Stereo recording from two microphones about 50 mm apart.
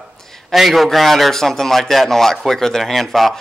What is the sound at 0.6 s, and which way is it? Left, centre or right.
A man's voice, centre.